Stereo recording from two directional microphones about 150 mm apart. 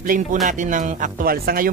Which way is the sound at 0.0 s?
65° right (ahead or behind).